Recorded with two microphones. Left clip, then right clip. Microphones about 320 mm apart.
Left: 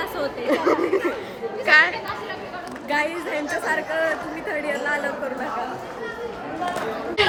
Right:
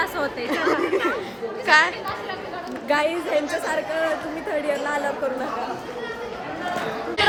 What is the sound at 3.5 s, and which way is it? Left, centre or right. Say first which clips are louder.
Speech: left 1 dB; centre.